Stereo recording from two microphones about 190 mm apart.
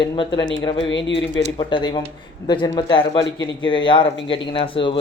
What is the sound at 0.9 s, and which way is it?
Speech, 75° left (ahead or behind).